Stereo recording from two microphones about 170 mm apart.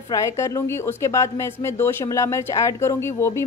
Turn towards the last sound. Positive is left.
turn(degrees=15)  # may be behind; listen again after turning